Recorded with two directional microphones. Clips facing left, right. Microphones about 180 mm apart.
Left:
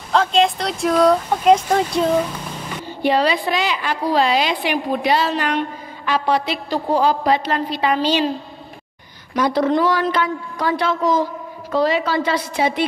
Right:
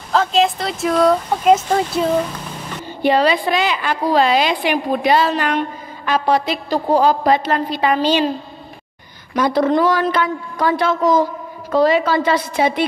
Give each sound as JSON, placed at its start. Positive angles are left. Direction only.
{"t": 0.1, "sound": "speech", "side_deg": -5}
{"t": 2.3, "sound": "a sound", "side_deg": 10}
{"t": 3.0, "sound": "a woman's voice", "side_deg": -55}
{"t": 9.3, "sound": "a woman's voice", "side_deg": -50}